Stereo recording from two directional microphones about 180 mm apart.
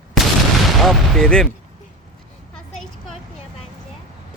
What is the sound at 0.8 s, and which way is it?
Speech, centre (ahead or behind).